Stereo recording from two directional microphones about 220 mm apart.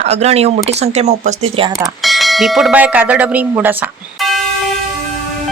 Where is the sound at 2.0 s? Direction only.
Centre (ahead or behind).